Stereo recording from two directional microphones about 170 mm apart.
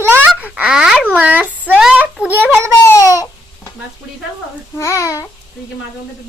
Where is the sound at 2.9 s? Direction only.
20° left (ahead or behind).